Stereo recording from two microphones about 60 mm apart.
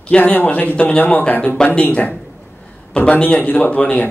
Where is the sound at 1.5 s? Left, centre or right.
Centre.